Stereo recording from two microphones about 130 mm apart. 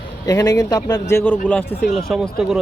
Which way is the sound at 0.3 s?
30° left (ahead or behind).